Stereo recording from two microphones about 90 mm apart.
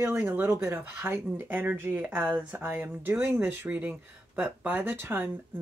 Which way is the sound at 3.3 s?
15° right (ahead or behind).